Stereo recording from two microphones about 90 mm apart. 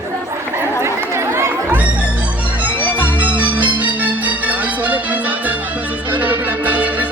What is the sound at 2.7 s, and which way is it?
Music, 20° left (ahead or behind).